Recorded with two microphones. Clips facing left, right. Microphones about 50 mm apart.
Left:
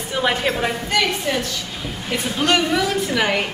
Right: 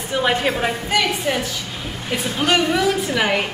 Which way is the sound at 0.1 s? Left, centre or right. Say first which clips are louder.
Right 1 dB; centre.